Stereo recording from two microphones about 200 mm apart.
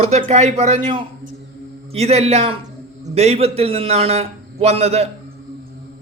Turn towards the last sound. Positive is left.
turn(degrees=-30)  # may be behind; listen again after turning